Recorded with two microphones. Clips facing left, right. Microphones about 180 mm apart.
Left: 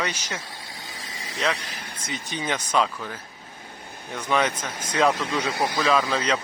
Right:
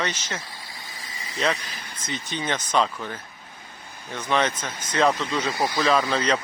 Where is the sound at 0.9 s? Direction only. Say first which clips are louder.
Left 2 dB; 85° left.